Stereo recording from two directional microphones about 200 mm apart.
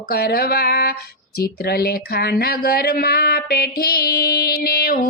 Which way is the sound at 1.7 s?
50° left (ahead or behind).